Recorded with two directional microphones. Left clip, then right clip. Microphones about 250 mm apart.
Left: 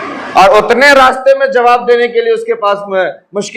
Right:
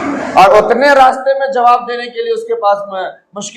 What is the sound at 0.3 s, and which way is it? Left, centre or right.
A man's voice, left.